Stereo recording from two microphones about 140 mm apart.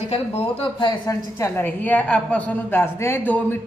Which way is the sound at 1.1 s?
20° left (ahead or behind).